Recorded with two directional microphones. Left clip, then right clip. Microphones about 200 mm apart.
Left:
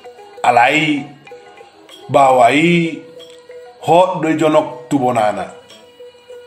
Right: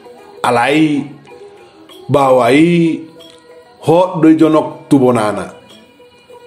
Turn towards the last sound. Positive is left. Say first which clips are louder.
# right 2 dB
turn(degrees=-30)  # may be behind; listen again after turning